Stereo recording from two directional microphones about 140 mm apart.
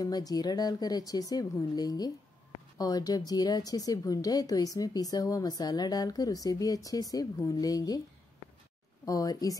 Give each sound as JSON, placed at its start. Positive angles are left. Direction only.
{"t": 0.0, "sound": "a woman's voice", "side_deg": 30}
{"t": 9.0, "sound": "a woman's voice", "side_deg": 25}